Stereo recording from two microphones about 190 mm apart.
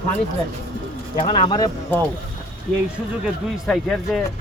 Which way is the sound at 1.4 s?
20° left (ahead or behind).